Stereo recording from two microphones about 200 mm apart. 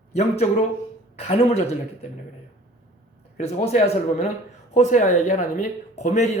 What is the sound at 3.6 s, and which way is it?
Speech, 30° left (ahead or behind).